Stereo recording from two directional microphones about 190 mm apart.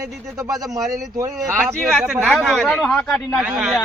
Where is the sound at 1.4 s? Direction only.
Centre (ahead or behind).